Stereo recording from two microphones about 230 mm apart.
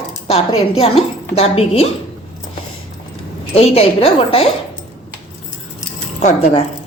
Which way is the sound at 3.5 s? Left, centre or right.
Left.